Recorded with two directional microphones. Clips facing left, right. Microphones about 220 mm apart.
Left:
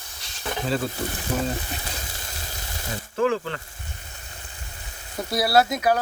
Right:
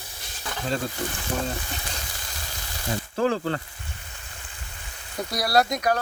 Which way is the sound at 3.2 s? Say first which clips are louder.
Left 1 dB; 35° right (ahead or behind).